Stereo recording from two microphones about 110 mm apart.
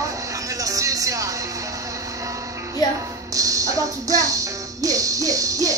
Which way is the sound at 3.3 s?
30° right (ahead or behind).